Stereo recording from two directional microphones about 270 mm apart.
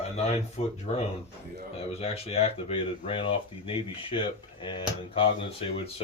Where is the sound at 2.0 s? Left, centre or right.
Left.